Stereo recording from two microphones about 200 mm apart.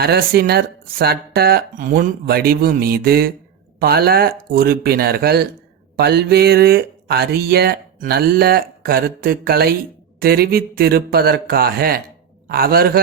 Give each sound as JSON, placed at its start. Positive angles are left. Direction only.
{"t": 0.0, "sound": "speech", "side_deg": -50}